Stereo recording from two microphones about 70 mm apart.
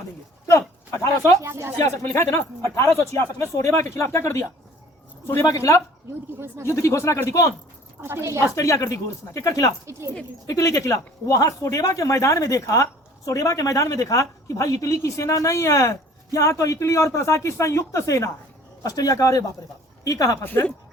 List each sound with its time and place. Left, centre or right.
1.4 s speech: right
2.0 s speech: left
5.5 s speech: left
8.0 s a woman's voice: right
8.5 s speech: left
18.8 s speech: left
20.4 s speech: left